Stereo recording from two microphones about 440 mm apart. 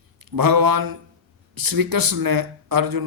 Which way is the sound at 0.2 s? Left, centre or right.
Right.